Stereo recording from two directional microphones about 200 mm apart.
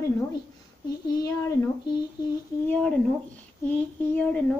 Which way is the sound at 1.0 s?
20° left (ahead or behind).